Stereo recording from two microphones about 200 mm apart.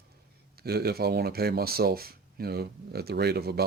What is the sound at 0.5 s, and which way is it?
Speech, 50° right (ahead or behind).